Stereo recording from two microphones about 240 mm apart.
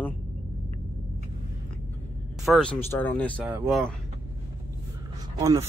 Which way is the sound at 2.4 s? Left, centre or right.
Centre.